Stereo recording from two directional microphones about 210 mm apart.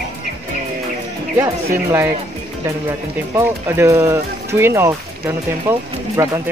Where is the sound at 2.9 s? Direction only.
10° right (ahead or behind).